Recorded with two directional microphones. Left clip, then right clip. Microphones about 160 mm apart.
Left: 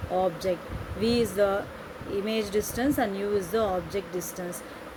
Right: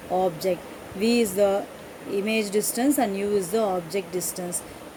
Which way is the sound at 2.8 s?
35° right (ahead or behind).